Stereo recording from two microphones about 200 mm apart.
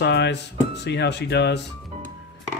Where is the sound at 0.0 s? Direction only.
60° left (ahead or behind).